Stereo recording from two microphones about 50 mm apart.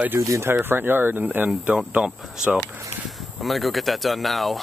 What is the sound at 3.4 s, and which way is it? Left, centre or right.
Speech, centre.